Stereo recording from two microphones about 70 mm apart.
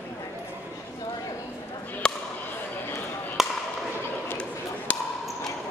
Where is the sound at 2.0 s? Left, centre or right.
Centre.